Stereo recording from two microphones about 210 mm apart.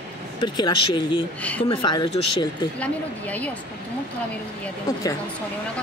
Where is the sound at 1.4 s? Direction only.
5° left (ahead or behind).